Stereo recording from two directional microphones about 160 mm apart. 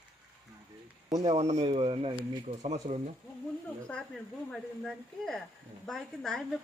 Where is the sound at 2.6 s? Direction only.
50° right (ahead or behind).